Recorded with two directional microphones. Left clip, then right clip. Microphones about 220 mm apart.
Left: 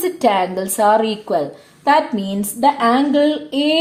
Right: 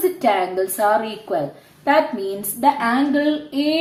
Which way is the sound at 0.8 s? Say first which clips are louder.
Left 6 dB; 50° left (ahead or behind).